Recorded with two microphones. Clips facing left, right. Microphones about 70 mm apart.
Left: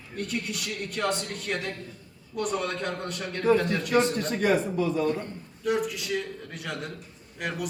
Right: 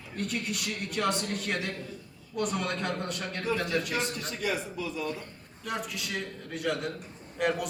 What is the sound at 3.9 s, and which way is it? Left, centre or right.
A man's voice, left.